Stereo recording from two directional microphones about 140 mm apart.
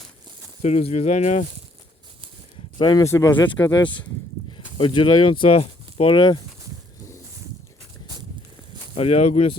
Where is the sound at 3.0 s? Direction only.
20° left (ahead or behind).